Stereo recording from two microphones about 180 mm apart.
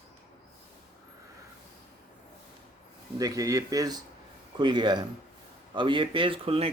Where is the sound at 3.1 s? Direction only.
20° right (ahead or behind).